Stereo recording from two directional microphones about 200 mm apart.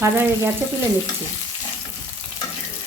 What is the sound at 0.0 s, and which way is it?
Speech, 10° right (ahead or behind).